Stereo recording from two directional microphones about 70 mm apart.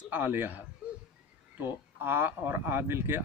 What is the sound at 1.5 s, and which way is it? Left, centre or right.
Speech, right.